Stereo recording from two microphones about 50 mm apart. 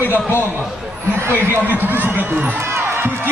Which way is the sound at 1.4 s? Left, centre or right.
Right.